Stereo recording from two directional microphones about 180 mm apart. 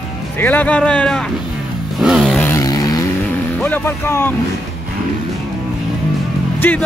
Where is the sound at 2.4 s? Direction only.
15° left (ahead or behind).